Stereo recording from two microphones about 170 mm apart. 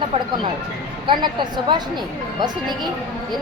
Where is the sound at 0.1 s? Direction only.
25° right (ahead or behind).